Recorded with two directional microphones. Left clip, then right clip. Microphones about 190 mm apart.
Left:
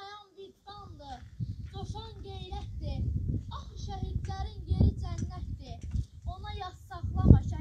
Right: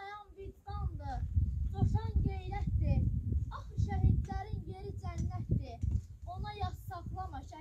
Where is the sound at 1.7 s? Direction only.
15° right (ahead or behind).